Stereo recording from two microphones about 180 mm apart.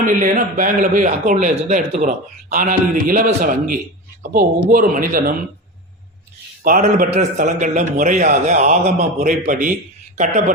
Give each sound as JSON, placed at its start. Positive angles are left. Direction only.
{"t": 0.0, "sound": "a man's voice", "side_deg": -50}
{"t": 6.6, "sound": "a man's voice", "side_deg": -50}